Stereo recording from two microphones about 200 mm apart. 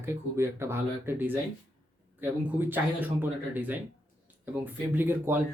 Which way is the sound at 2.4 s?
10° right (ahead or behind).